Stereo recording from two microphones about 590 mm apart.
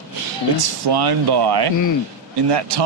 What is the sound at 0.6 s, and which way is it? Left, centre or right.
Speech, right.